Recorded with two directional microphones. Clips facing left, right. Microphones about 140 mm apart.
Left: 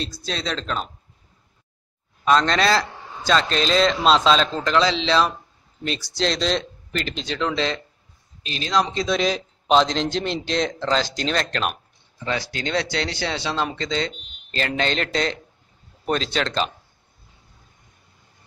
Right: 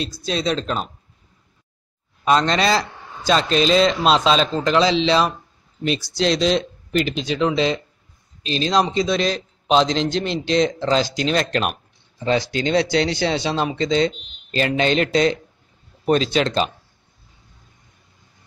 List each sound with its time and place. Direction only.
0.0 s a man's voice: 10° right (ahead or behind)
2.2 s a man's voice: 5° right (ahead or behind)
8.4 s speech: 25° right (ahead or behind)
8.8 s a man's voice: 5° right (ahead or behind)
12.2 s a man's voice: 25° right (ahead or behind)